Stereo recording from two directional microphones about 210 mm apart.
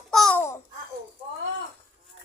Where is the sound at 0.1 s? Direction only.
5° left (ahead or behind).